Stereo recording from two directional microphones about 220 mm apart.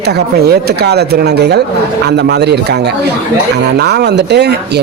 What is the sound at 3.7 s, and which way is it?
Speech, 50° right (ahead or behind).